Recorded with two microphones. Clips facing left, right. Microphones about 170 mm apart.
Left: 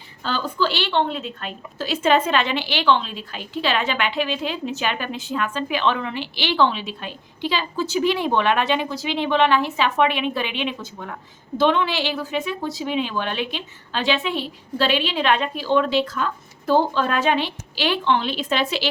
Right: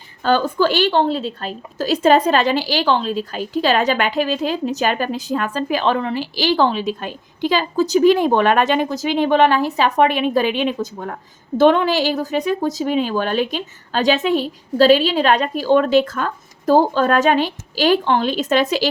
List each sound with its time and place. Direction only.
0.2 s a woman's voice: 50° right (ahead or behind)